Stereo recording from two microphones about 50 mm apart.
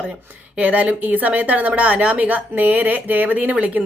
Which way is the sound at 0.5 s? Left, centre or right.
Right.